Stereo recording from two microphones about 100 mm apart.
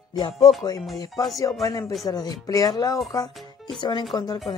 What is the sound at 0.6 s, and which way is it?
Speech, 40° left (ahead or behind).